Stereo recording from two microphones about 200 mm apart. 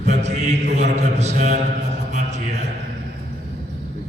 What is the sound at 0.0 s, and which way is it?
Mantra, 35° right (ahead or behind).